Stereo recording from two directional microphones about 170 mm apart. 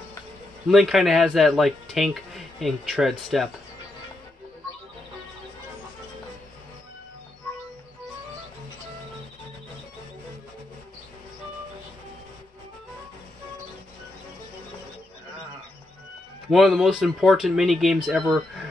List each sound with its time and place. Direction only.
0.7 s speech: centre (ahead or behind)
16.4 s speech: centre (ahead or behind)